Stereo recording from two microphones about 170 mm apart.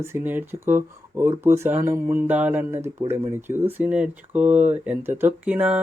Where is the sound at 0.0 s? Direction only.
15° right (ahead or behind).